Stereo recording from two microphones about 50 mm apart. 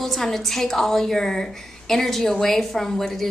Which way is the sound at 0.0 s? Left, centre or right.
Centre.